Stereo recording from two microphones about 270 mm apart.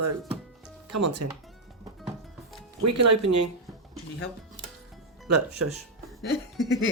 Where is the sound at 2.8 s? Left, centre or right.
Right.